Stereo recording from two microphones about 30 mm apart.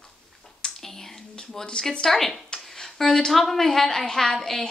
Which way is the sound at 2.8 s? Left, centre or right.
Centre.